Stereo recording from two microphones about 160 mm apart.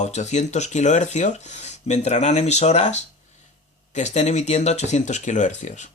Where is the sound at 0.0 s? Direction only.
45° left (ahead or behind).